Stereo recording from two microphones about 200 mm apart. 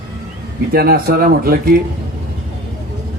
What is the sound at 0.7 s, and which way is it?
Speech, 50° right (ahead or behind).